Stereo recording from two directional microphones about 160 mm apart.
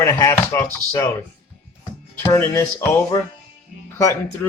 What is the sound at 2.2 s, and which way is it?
Speech, 20° left (ahead or behind).